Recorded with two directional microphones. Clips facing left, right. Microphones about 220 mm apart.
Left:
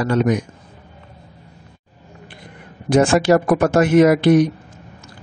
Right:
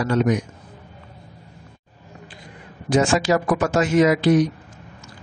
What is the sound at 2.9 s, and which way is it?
A man's voice, 55° left (ahead or behind).